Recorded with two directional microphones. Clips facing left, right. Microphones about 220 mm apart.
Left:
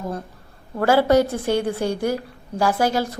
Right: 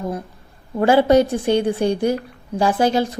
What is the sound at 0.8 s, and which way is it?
A woman's voice, 20° right (ahead or behind).